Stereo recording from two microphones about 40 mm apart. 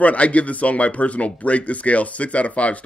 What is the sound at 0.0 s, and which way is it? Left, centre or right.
Speech, left.